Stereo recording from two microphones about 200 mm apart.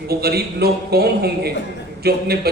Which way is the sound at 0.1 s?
50° right (ahead or behind).